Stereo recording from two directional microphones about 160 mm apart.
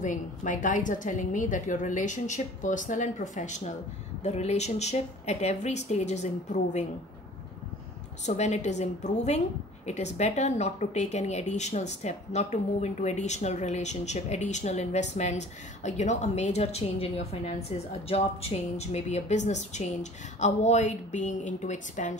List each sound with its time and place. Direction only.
0.0 s speech: 50° left (ahead or behind)
8.3 s speech: 45° left (ahead or behind)